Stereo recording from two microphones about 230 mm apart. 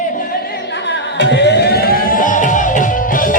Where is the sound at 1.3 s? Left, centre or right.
Left.